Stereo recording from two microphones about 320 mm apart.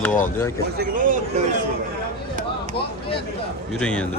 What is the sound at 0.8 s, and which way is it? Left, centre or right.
Speech, right.